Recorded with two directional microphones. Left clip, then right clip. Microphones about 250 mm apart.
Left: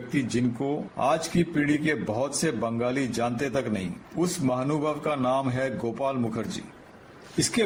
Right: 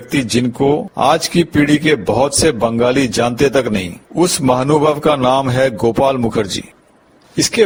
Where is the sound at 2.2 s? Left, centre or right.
Right.